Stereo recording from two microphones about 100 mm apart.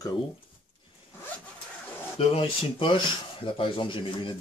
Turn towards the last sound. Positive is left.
turn(degrees=60)  # may be behind; listen again after turning